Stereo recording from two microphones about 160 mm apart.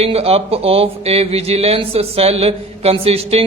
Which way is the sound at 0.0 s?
40° right (ahead or behind).